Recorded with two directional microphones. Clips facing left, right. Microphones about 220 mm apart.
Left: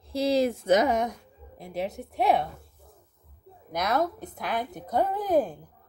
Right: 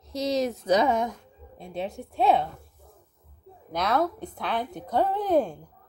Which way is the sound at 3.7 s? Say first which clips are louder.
Right 1 dB; 15° left (ahead or behind).